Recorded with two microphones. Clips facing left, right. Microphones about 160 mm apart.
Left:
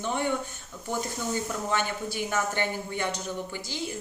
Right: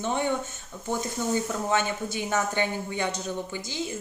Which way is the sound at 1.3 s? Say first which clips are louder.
Right 4 dB; 20° right (ahead or behind).